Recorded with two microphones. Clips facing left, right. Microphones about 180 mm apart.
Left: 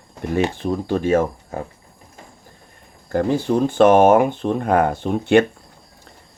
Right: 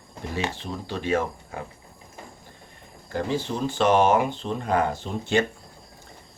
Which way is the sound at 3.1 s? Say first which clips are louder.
Left 8 dB; 50° left (ahead or behind).